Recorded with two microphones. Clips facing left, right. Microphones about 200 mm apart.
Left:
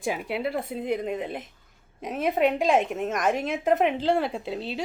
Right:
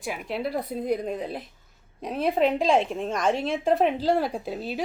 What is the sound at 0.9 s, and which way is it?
Speech, 5° left (ahead or behind).